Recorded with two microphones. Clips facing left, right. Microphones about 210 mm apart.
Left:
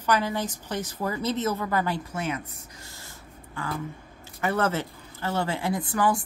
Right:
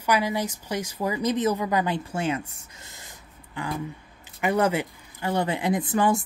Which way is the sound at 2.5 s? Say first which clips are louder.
Left 3 dB; 20° right (ahead or behind).